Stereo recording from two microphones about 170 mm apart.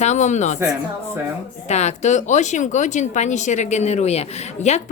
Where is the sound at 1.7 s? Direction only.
40° left (ahead or behind).